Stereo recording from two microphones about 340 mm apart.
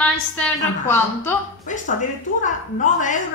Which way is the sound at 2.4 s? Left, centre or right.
Left.